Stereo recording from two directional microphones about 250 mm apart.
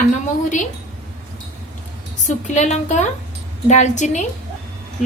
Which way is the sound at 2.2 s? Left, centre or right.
Left.